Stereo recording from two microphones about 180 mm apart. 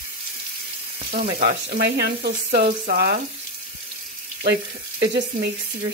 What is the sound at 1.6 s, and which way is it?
Speech, 70° right (ahead or behind).